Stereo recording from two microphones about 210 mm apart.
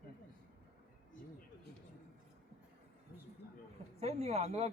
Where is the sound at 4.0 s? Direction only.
30° right (ahead or behind).